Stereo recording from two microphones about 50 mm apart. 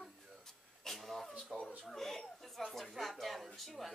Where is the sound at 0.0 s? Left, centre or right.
Centre.